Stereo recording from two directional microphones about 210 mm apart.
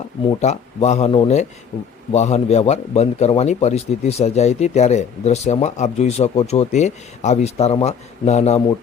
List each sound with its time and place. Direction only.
0.3 s a man's voice: 30° left (ahead or behind)